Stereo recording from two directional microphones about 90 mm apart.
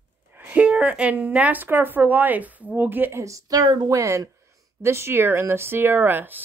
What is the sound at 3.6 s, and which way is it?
Speech, 60° right (ahead or behind).